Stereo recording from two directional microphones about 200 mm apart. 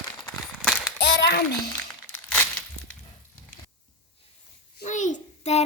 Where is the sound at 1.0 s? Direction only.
60° left (ahead or behind).